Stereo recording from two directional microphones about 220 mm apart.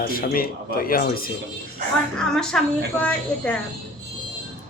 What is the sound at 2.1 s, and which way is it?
A woman's voice, 5° left (ahead or behind).